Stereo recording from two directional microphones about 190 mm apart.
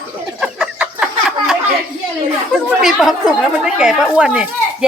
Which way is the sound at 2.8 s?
5° right (ahead or behind).